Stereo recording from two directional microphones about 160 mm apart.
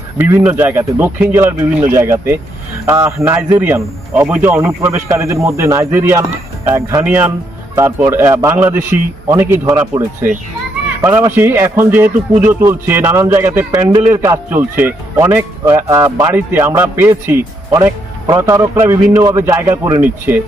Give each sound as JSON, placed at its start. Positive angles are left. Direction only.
{"t": 0.2, "sound": "speech", "side_deg": -15}